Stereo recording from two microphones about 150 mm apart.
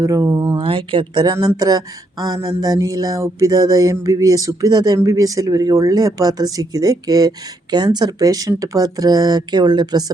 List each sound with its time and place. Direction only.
0.0 s speech: 20° right (ahead or behind)